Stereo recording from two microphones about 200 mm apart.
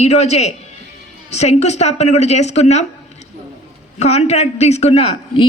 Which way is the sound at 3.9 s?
30° left (ahead or behind).